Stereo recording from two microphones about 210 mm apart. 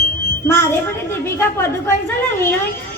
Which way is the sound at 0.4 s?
10° left (ahead or behind).